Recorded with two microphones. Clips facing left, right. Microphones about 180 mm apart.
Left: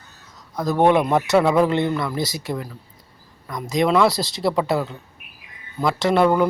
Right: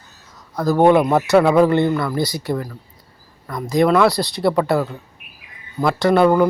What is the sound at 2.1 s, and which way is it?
Speech, 25° left (ahead or behind).